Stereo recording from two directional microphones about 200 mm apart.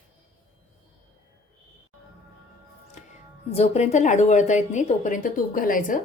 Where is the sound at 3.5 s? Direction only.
30° left (ahead or behind).